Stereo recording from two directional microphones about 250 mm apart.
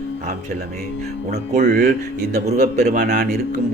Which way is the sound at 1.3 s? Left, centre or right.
Right.